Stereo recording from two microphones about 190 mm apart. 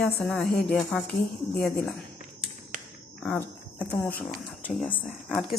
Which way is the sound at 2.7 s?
40° right (ahead or behind).